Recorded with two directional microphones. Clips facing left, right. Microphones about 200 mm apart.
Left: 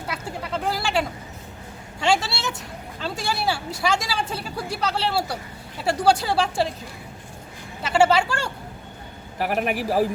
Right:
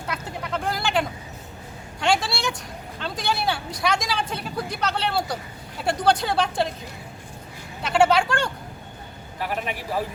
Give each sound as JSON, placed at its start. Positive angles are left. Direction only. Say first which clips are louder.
{"t": 0.1, "sound": "a sound", "louder": "even", "side_deg": 5}
{"t": 3.0, "sound": "speech", "louder": "even", "side_deg": 5}
{"t": 7.8, "sound": "speech", "louder": "even", "side_deg": 5}
{"t": 9.4, "sound": "a man's voice", "louder": "left 5 dB", "side_deg": 50}